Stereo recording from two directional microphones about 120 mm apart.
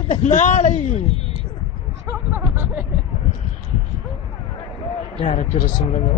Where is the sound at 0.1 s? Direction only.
80° left.